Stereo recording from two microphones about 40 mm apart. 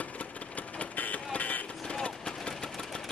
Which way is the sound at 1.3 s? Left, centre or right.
Left.